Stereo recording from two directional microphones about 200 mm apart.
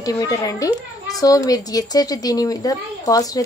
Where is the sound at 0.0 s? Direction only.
15° left (ahead or behind).